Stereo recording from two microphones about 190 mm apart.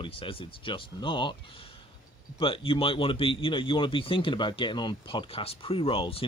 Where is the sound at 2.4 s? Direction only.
30° left (ahead or behind).